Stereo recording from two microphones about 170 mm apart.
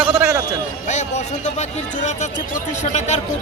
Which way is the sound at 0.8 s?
45° left (ahead or behind).